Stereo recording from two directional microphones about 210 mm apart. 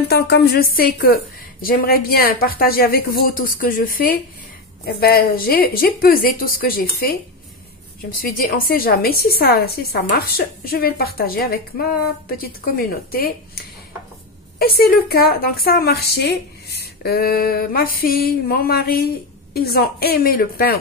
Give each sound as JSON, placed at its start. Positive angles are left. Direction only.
{"t": 0.1, "sound": "a woman's voice", "side_deg": 50}
{"t": 8.2, "sound": "a woman's voice", "side_deg": 45}
{"t": 14.6, "sound": "a woman's voice", "side_deg": 45}